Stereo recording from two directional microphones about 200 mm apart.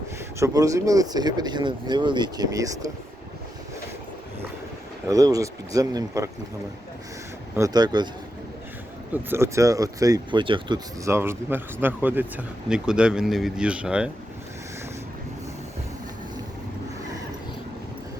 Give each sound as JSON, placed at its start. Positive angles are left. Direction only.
{"t": 0.3, "sound": "speech", "side_deg": -15}
{"t": 5.0, "sound": "speech", "side_deg": -15}
{"t": 7.5, "sound": "speech", "side_deg": -15}
{"t": 9.3, "sound": "speech", "side_deg": -15}